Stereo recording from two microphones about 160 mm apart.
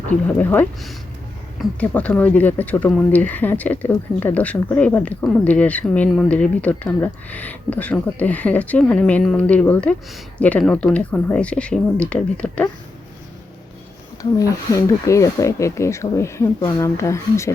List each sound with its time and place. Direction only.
0.3 s speech: 10° left (ahead or behind)
14.2 s speech: 20° left (ahead or behind)